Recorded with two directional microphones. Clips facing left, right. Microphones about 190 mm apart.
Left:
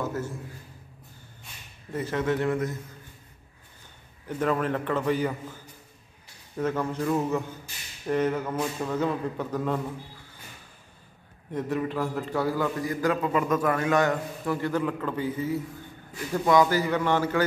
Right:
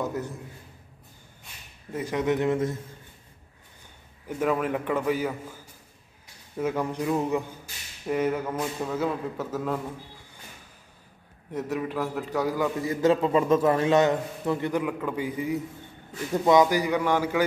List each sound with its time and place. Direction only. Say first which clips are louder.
0.0 s a man's voice: right 1 dB; 15° right (ahead or behind)
1.9 s a man's voice: right 1 dB; 10° right (ahead or behind)
4.3 s a man's voice: even; 10° right (ahead or behind)
11.5 s a man's voice: left 1 dB; 5° right (ahead or behind)
12.7 s a man's voice: right 4 dB; 25° right (ahead or behind)